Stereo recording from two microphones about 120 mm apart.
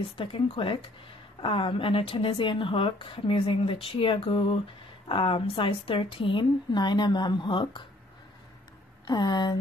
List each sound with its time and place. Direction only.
0.0 s a woman's voice: 45° left (ahead or behind)
9.0 s speech: 35° left (ahead or behind)